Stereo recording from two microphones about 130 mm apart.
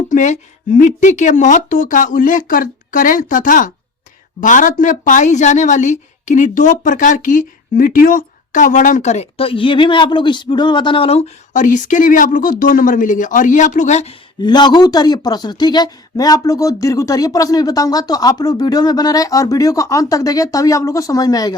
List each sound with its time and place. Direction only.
0.1 s a sound: 70° left (ahead or behind)
0.8 s a woman's voice: 75° left (ahead or behind); by 11.3 s 50° left (ahead or behind)
11.5 s speech: 75° left (ahead or behind); by 14.2 s 60° left (ahead or behind)
14.4 s speech: 35° left (ahead or behind)